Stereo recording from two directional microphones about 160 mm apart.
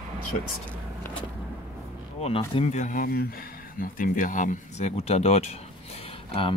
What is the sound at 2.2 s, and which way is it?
Speech, 35° left (ahead or behind).